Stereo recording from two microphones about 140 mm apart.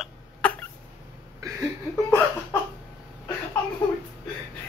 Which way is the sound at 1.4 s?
25° right (ahead or behind).